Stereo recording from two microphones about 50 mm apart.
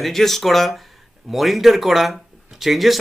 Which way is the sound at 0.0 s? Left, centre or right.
Centre.